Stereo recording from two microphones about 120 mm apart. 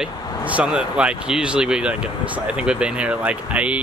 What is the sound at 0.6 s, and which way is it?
Speech, 10° right (ahead or behind).